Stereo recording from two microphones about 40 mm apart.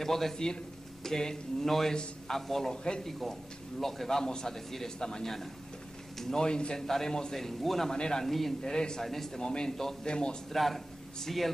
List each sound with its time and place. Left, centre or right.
0.0 s speech: centre
4.2 s speech: centre
6.1 s speech: centre
7.3 s speech: centre
8.3 s a man's voice: centre
8.7 s speech: centre
9.0 s speech: centre
9.4 s speech: centre